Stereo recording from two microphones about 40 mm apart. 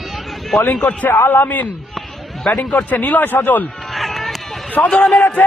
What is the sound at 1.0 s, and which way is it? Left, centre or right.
Speech, left.